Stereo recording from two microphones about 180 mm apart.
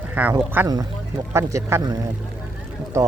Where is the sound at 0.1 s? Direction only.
10° right (ahead or behind).